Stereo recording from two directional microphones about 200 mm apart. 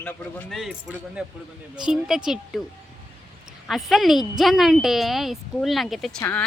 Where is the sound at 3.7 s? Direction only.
Centre (ahead or behind).